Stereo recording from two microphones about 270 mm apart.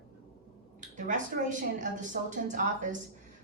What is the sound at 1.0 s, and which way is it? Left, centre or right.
A woman's voice, right.